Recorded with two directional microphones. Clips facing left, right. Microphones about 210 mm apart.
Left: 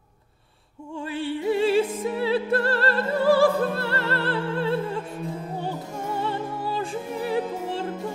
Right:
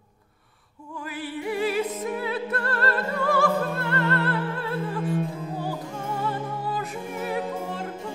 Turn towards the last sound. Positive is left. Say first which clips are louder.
# left 2 dB
turn(degrees=30)  # may be behind; listen again after turning